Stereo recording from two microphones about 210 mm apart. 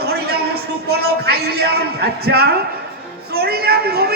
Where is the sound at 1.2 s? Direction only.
50° right (ahead or behind).